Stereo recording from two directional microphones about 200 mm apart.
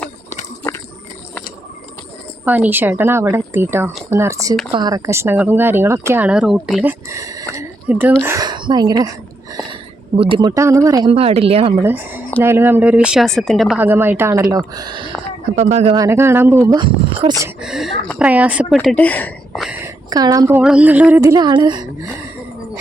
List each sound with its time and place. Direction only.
0.0 s a sound: 15° left (ahead or behind)
2.4 s speech: 10° right (ahead or behind)
7.1 s a sound: 15° right (ahead or behind)
8.2 s a woman's voice: 15° right (ahead or behind)
10.2 s speech: 25° right (ahead or behind)
11.1 s speech: 30° right (ahead or behind)
11.8 s speech: 10° right (ahead or behind); by 16.0 s 30° right (ahead or behind)
16.0 s speech: 10° right (ahead or behind)
17.6 s speech: centre (ahead or behind)
19.8 s a sound: 20° right (ahead or behind)
20.6 s speech: 5° right (ahead or behind); by 22.1 s 20° right (ahead or behind)